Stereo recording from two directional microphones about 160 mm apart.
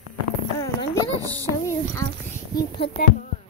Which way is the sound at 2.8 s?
35° left (ahead or behind).